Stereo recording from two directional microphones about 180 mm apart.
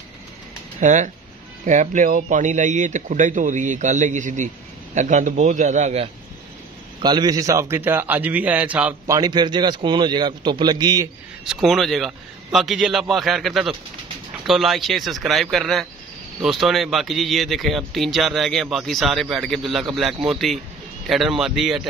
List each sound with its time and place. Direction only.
0.7 s speech: 40° right (ahead or behind)
7.0 s a man's voice: 25° right (ahead or behind)
11.4 s speech: centre (ahead or behind)